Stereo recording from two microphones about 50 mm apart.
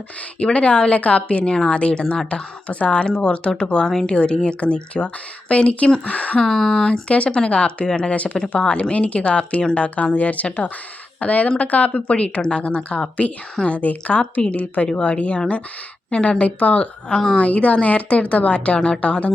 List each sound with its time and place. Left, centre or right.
0.3 s a woman's voice: left
6.4 s a woman's voice: centre
17.2 s a woman's voice: centre
17.4 s a woman's voice: left